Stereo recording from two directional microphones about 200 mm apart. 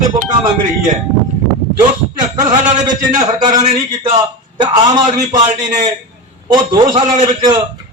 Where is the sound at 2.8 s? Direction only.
20° right (ahead or behind).